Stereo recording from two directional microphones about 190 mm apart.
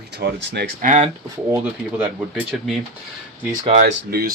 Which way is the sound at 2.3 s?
Centre (ahead or behind).